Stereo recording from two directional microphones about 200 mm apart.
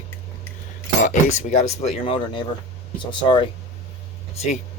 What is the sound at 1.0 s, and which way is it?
Speech, 35° left (ahead or behind).